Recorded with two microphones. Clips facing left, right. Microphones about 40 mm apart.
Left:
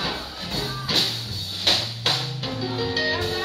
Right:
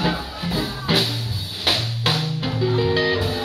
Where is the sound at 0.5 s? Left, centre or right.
Centre.